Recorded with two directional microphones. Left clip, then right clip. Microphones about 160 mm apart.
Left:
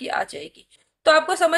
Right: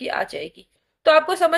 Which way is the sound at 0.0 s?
20° right (ahead or behind).